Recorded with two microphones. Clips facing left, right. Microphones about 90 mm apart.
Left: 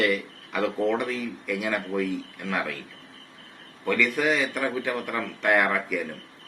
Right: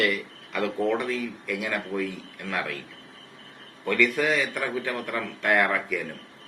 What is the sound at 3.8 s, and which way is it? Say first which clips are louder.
A man's voice: even; 5° left (ahead or behind).